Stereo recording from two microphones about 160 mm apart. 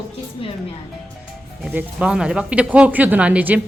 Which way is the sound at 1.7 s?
5° right (ahead or behind).